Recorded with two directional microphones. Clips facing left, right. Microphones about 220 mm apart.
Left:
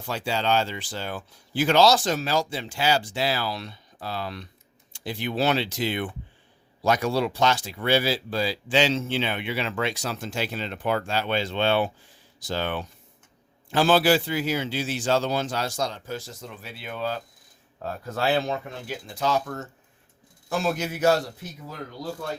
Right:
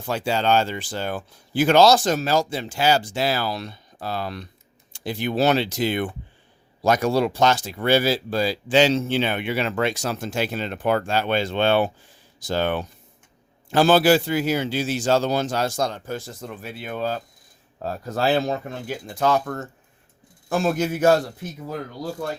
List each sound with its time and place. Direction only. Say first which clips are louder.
0.0 s speech: right 4 dB; 50° right (ahead or behind)